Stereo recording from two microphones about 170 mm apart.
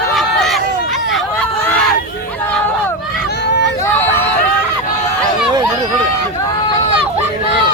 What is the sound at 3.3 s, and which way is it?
Hubbub, 85° left.